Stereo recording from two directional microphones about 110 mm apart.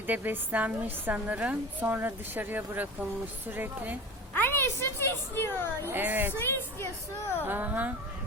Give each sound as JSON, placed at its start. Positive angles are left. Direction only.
{"t": 0.1, "sound": "a woman's voice", "side_deg": -15}
{"t": 4.4, "sound": "a woman's voice", "side_deg": 20}
{"t": 5.9, "sound": "speech", "side_deg": -15}
{"t": 6.4, "sound": "a woman's voice", "side_deg": 20}
{"t": 7.4, "sound": "a woman's voice", "side_deg": -15}